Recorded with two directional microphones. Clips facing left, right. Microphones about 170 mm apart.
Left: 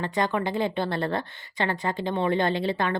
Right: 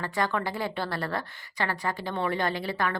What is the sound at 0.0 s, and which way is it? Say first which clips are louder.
A woman's voice: left 3 dB; 20° left (ahead or behind).